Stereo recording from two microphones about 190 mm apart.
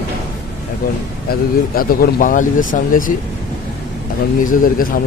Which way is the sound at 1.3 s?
50° left (ahead or behind).